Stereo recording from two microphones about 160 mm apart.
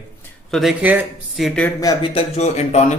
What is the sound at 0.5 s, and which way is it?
Speech, centre (ahead or behind).